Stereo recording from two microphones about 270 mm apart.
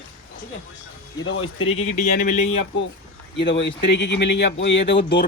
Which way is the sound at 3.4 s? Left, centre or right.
Left.